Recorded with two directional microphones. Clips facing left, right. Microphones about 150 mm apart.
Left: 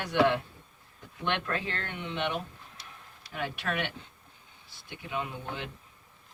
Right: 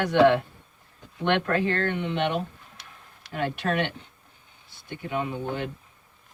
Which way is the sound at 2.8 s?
60° right (ahead or behind).